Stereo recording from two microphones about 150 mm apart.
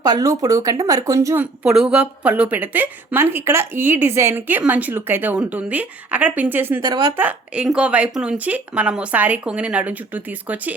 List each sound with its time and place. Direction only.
0.0 s a woman's voice: 25° right (ahead or behind)
1.6 s a woman's voice: 5° right (ahead or behind)
6.8 s a woman's voice: 25° right (ahead or behind)
7.2 s a woman's voice: 10° right (ahead or behind)